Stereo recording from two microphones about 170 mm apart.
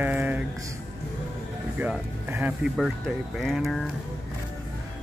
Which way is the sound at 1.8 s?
10° right (ahead or behind).